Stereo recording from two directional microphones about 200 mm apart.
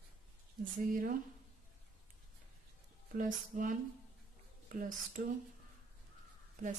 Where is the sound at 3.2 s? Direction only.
40° right (ahead or behind).